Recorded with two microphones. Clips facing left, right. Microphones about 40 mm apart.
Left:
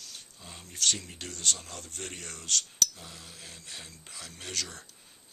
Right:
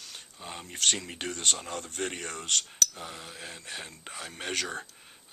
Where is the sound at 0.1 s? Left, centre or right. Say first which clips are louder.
Right 6 dB; right.